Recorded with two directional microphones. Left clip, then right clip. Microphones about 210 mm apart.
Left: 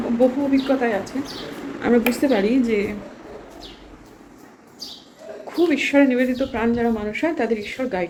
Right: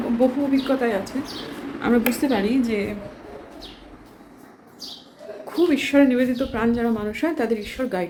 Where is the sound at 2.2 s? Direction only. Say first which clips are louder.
Left 3 dB; 20° right (ahead or behind).